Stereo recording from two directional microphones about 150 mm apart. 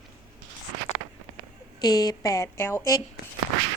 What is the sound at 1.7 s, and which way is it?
A woman's voice, 25° left (ahead or behind).